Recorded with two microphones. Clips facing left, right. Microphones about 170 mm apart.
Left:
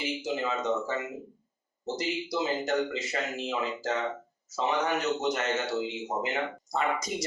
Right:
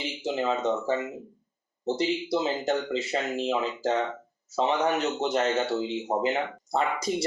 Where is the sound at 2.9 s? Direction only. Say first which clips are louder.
Right 5 dB; 35° right (ahead or behind).